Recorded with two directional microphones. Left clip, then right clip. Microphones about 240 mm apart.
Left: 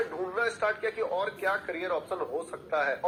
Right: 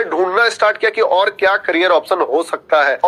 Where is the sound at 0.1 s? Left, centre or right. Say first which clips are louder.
Right 17 dB; right.